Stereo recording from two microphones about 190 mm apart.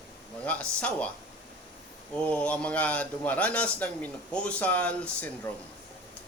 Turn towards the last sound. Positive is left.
turn(degrees=5)  # may be behind; listen again after turning